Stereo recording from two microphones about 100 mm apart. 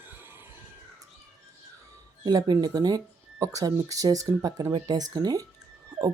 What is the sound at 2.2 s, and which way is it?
Speech, 40° right (ahead or behind).